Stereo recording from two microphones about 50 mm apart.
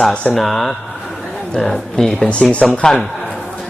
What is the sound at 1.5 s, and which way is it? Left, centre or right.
A man's voice, centre.